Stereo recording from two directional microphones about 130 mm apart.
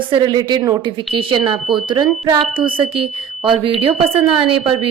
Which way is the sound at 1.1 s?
45° right (ahead or behind).